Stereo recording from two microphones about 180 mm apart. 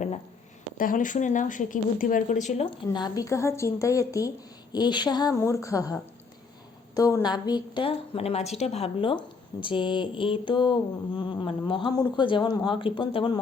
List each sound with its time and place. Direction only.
0.8 s speech: 50° left (ahead or behind); by 4.3 s 15° left (ahead or behind)
4.7 s mantra: 25° left (ahead or behind)